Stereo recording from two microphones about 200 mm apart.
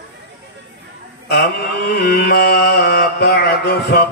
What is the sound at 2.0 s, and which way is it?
Mantra, 55° left (ahead or behind).